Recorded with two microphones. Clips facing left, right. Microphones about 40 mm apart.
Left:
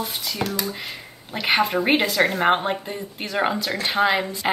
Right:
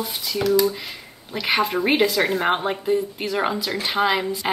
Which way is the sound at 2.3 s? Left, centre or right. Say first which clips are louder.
Left 2 dB; centre.